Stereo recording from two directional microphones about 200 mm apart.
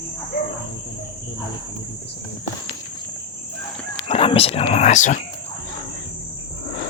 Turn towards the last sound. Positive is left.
turn(degrees=40)  # may be behind; listen again after turning